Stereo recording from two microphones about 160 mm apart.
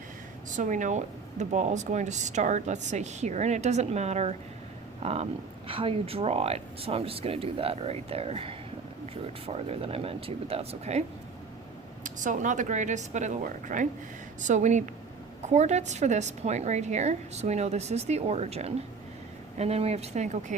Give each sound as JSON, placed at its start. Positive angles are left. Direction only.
{"t": 0.5, "sound": "speech", "side_deg": -50}
{"t": 12.0, "sound": "speech", "side_deg": -55}